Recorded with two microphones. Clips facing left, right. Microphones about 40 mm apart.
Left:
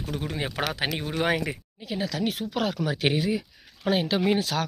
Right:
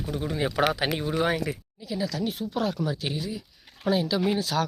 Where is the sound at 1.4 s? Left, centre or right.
Left.